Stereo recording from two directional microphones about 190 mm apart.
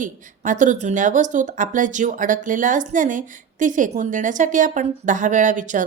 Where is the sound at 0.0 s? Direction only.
40° right (ahead or behind).